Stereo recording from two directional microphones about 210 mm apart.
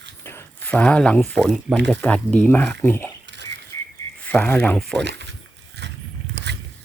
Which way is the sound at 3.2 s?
55° right (ahead or behind).